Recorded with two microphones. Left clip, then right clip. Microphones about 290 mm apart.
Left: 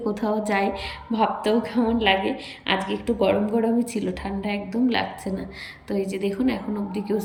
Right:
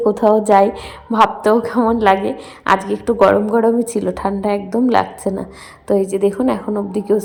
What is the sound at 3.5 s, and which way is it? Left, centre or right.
Speech, right.